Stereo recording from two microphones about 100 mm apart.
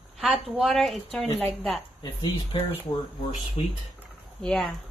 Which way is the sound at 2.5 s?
55° left (ahead or behind).